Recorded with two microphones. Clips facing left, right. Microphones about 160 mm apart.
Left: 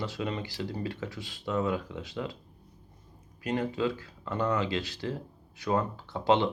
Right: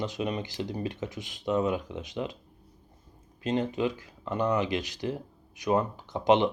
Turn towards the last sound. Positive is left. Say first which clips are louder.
# right 2 dB
turn(degrees=-20)  # may be behind; listen again after turning